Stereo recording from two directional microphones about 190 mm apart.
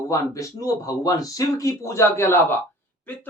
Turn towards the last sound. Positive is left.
turn(degrees=10)  # may be behind; listen again after turning